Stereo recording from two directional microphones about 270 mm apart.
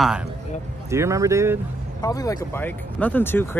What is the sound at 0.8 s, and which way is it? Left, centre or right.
Speech, centre.